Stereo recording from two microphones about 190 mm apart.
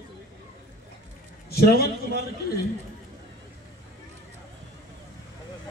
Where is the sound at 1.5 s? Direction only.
55° left (ahead or behind).